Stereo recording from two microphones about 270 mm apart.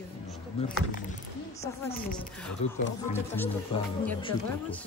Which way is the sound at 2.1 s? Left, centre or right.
Centre.